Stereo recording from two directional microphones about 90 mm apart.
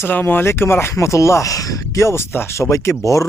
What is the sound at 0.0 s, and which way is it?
Speech, 20° left (ahead or behind).